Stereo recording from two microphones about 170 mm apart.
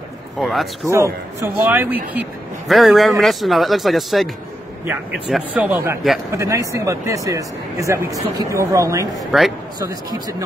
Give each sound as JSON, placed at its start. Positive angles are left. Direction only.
{"t": 0.4, "sound": "speech", "side_deg": 0}
{"t": 0.8, "sound": "speech", "side_deg": -15}
{"t": 9.2, "sound": "speech", "side_deg": 0}